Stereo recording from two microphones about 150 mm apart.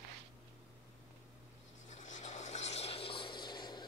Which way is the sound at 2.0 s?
55° left (ahead or behind).